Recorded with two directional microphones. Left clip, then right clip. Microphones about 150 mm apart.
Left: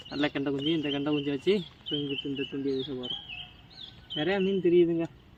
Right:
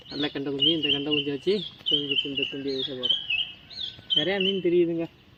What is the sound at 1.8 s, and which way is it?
Speech, 80° left.